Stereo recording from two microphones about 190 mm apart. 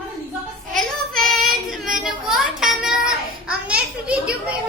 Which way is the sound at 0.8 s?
Centre (ahead or behind).